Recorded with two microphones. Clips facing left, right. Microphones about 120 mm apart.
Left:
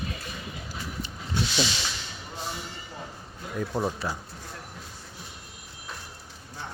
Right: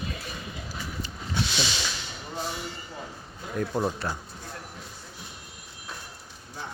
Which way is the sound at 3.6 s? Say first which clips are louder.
Right 1 dB; 5° left (ahead or behind).